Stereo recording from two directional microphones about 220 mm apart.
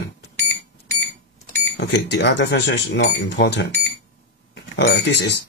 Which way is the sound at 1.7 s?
50° left (ahead or behind).